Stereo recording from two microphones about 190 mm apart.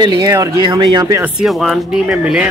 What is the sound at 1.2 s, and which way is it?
Speech, centre (ahead or behind).